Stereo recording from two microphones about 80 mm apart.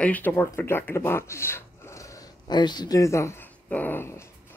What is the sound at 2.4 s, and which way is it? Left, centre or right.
Speech, left.